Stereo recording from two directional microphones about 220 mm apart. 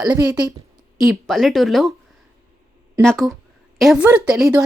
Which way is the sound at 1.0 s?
Centre (ahead or behind).